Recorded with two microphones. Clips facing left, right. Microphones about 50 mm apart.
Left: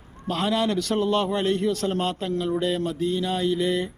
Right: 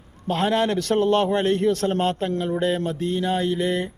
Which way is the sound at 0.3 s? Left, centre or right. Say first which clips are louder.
Right 3 dB; right.